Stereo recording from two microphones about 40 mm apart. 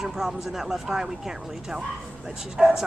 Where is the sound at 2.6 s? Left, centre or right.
Centre.